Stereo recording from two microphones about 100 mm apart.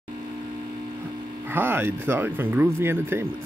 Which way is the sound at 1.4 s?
20° right (ahead or behind).